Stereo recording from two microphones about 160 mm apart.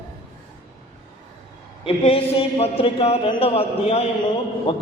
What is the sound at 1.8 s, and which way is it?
A man's voice, 35° left (ahead or behind).